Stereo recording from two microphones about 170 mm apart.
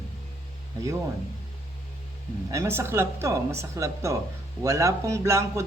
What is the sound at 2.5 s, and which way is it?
A woman's voice, 15° right (ahead or behind).